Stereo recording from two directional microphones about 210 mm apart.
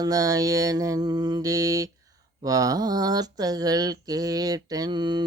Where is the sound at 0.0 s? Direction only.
15° right (ahead or behind).